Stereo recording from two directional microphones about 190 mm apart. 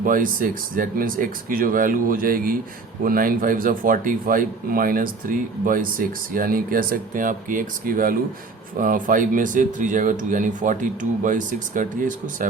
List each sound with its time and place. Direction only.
0.0 s speech: 45° right (ahead or behind)